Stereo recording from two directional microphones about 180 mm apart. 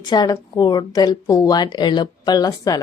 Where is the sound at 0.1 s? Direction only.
20° left (ahead or behind).